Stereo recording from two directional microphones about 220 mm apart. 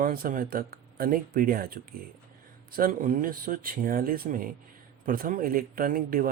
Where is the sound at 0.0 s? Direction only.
40° right (ahead or behind).